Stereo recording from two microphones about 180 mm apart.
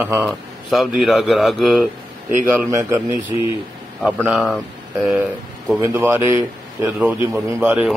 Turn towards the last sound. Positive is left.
turn(degrees=-5)  # may be behind; listen again after turning